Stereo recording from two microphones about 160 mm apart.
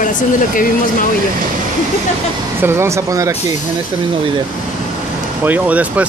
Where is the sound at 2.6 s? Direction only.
15° right (ahead or behind).